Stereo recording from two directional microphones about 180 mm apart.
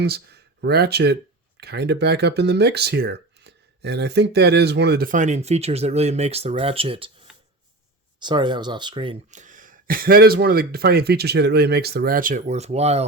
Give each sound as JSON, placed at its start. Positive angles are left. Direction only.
{"t": 0.0, "sound": "speech", "side_deg": -65}
{"t": 8.2, "sound": "speech", "side_deg": -25}
{"t": 9.3, "sound": "speech", "side_deg": -45}